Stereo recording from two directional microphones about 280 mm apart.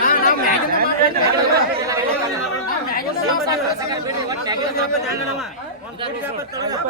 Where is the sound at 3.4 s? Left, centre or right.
Centre.